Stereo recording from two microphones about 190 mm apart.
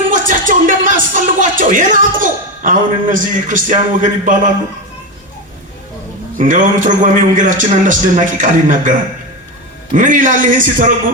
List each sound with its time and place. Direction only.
0.1 s speech: 45° right (ahead or behind)
6.3 s a man's voice: 45° right (ahead or behind)